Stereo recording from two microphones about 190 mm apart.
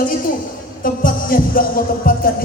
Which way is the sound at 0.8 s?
45° left (ahead or behind).